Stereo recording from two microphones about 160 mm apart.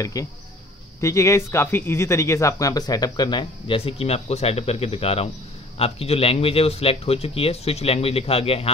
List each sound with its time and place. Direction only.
0.0 s a man's voice: 20° left (ahead or behind); by 8.7 s 35° left (ahead or behind)